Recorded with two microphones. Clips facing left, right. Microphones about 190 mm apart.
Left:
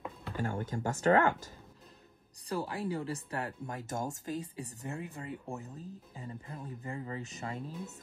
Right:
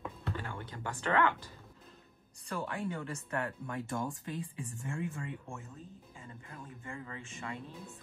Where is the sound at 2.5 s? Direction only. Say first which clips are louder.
Left 2 dB; 35° left (ahead or behind).